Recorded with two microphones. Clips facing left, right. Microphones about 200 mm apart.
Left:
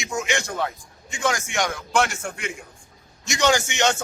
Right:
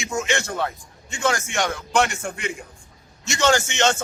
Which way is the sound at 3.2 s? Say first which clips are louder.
Right 1 dB; 15° left (ahead or behind).